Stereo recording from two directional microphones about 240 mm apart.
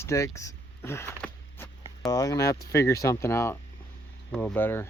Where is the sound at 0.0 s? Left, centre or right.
Centre.